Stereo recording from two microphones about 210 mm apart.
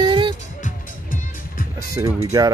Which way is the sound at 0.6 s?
40° left (ahead or behind).